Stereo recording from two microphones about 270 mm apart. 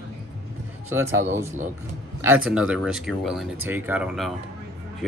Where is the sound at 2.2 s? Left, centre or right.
Centre.